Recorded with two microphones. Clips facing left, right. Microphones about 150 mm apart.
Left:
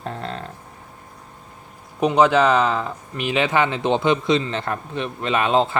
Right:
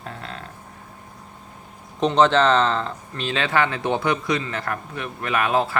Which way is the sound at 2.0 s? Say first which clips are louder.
Left 1 dB; 10° left (ahead or behind).